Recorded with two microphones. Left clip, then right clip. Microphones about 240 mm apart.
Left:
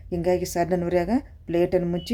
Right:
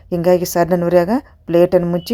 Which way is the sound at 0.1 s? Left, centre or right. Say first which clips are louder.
Right 9 dB; right.